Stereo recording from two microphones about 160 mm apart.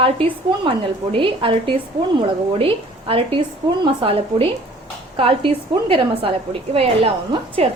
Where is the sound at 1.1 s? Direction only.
35° right (ahead or behind).